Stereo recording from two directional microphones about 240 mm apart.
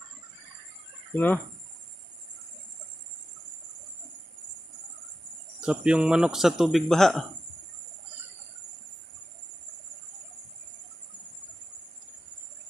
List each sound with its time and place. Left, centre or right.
1.1 s speech: centre
5.5 s speech: centre